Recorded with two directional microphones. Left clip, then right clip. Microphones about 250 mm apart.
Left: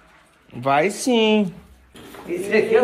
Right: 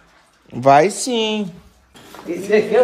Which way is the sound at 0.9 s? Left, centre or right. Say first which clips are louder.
Left 2 dB; centre.